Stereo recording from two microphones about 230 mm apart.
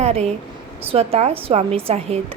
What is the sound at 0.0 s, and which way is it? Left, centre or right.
A woman's voice, right.